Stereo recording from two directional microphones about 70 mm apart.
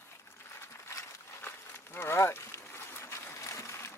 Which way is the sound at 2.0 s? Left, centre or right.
Left.